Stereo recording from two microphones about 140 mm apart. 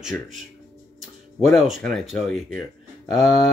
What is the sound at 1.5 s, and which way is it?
Speech, centre (ahead or behind).